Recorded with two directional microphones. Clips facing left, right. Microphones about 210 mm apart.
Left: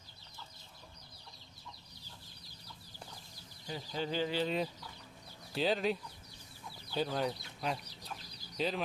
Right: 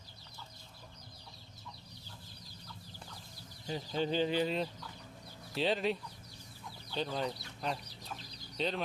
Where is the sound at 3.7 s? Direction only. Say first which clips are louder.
Right 4 dB; 25° right (ahead or behind).